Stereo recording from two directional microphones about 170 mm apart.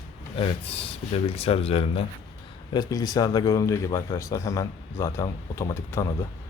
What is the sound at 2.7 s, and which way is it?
A man's voice, 25° left (ahead or behind).